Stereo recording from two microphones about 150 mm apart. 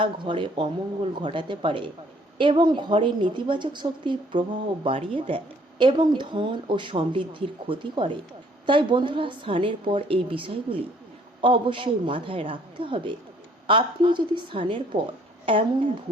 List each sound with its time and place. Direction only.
0.0 s a woman's voice: 35° right (ahead or behind)